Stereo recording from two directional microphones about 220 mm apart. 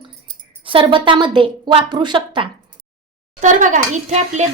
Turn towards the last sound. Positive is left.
turn(degrees=-30)  # may be behind; listen again after turning